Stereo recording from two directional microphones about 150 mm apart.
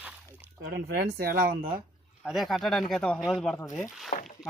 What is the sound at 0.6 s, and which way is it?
Speech, 90° right.